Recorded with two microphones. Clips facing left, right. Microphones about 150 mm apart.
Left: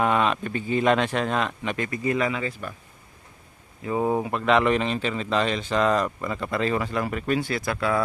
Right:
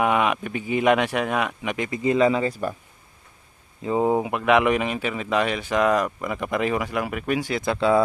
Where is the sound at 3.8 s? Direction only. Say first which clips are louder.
Right 3 dB; 20° right (ahead or behind).